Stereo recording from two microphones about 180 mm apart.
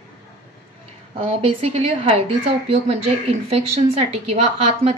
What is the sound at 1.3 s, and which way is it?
A woman's voice, 35° right (ahead or behind).